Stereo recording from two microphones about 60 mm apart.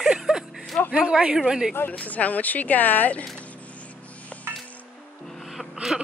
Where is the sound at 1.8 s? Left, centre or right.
Left.